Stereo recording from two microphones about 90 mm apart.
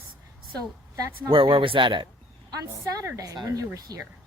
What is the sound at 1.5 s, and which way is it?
Speech, 70° right (ahead or behind).